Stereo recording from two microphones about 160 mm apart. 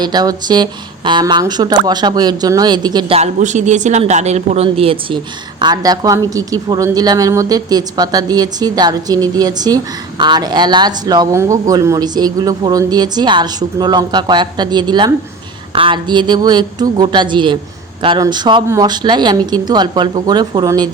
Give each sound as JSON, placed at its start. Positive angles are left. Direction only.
{"t": 0.0, "sound": "speech", "side_deg": -25}
{"t": 3.2, "sound": "speech", "side_deg": -50}